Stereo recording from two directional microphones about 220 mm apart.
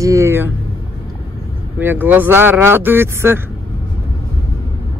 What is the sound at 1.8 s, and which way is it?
Speech, 10° right (ahead or behind).